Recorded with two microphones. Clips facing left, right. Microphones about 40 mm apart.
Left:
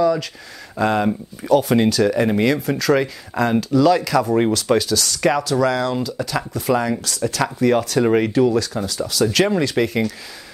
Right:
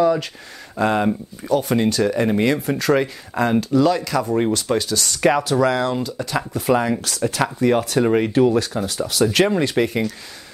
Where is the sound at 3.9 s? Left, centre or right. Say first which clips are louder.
Left 3 dB; centre.